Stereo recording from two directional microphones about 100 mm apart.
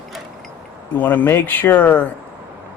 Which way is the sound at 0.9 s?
15° left (ahead or behind).